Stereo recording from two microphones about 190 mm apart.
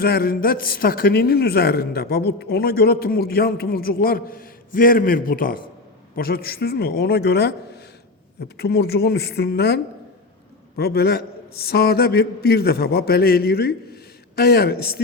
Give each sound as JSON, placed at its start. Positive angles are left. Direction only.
{"t": 0.0, "sound": "a man's voice", "side_deg": 55}